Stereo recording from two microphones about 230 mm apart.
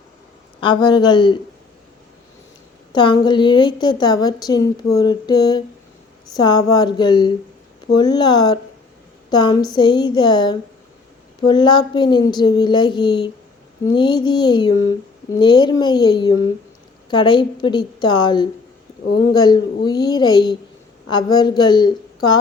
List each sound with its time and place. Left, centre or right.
0.6 s speech: left
2.9 s a woman's voice: centre